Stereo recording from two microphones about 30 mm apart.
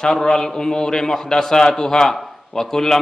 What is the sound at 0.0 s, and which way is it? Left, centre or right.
A man's voice, left.